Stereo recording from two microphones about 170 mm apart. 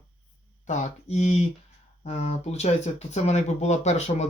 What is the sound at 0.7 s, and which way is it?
Speech, 45° left (ahead or behind).